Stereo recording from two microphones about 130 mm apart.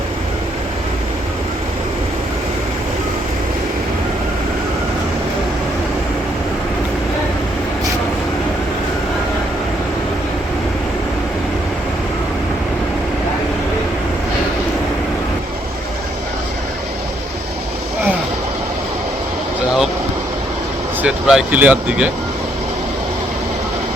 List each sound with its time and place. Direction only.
21.0 s speech: 10° right (ahead or behind)